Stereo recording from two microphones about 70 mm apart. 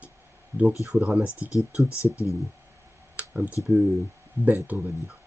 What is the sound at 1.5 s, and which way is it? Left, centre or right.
Speech, left.